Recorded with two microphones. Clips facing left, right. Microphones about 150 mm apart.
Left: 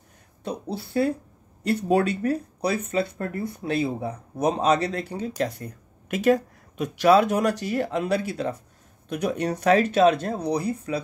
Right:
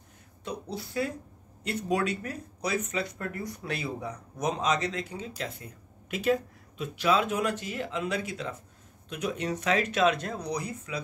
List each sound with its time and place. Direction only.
0.4 s speech: 30° left (ahead or behind)
9.3 s speech: 60° left (ahead or behind)
9.7 s speech: 35° left (ahead or behind)